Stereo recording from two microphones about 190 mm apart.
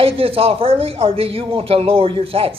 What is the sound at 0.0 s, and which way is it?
A man's voice, 30° right (ahead or behind).